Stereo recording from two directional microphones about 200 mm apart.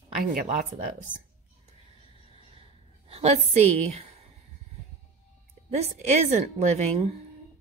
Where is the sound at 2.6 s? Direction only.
30° right (ahead or behind).